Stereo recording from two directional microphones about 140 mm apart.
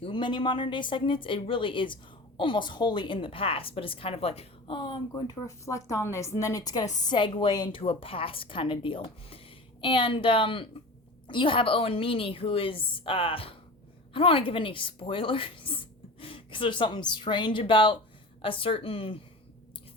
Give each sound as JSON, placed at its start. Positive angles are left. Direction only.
{"t": 0.0, "sound": "a woman's voice", "side_deg": 35}